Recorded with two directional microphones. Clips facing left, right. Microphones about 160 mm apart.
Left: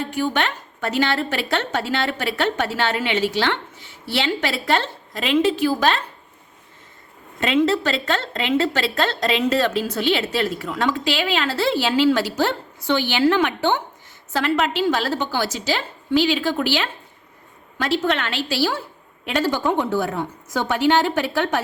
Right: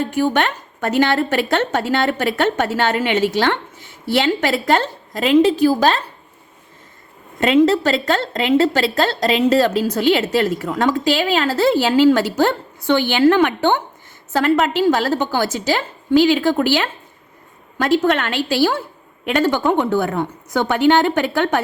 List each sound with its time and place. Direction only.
0.0 s speech: 45° right (ahead or behind)
7.3 s a woman's voice: 40° right (ahead or behind)